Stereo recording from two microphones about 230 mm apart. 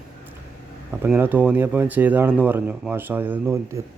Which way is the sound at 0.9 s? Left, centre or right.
Centre.